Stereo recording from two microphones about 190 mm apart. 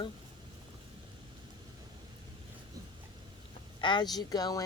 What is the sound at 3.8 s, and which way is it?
Speech, 25° left (ahead or behind).